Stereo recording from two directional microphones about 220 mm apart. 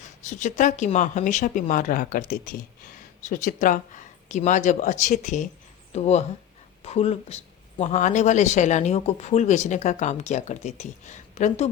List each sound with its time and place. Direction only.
0.0 s speech: 35° left (ahead or behind)